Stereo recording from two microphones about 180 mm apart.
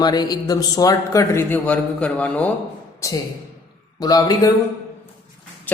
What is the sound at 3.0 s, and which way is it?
A man's voice, 20° left (ahead or behind).